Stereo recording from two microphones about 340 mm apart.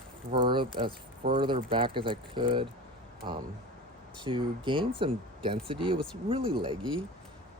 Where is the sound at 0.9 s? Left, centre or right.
Right.